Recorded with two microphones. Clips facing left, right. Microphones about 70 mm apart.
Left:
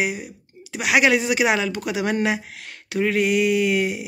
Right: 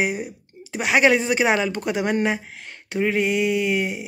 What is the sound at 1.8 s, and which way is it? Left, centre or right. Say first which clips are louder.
Speech: right 1 dB; centre.